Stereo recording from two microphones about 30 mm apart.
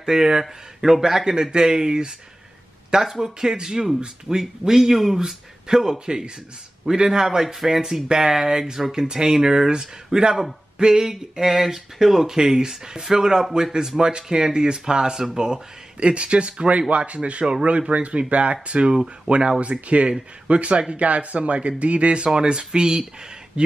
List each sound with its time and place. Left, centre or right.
0.0 s speech: right
3.0 s speech: centre
12.3 s speech: centre
16.0 s speech: right
18.9 s speech: right
19.6 s speech: right